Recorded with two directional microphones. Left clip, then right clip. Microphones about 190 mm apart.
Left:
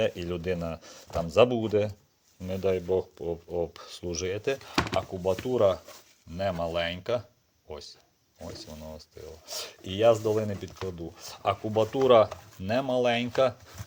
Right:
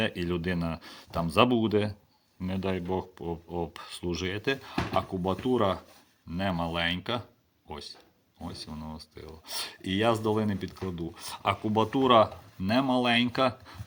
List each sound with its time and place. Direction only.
0.0 s speech: 25° left (ahead or behind)
9.1 s speech: 30° left (ahead or behind)